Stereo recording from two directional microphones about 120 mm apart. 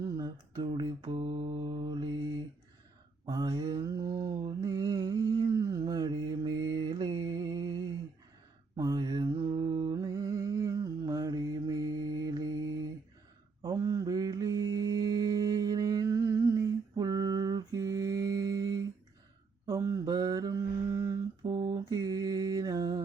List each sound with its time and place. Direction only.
0.2 s mantra: 35° right (ahead or behind)
3.2 s mantra: 35° right (ahead or behind)